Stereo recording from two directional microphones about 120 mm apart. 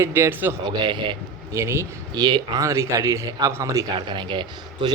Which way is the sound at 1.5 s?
25° right (ahead or behind).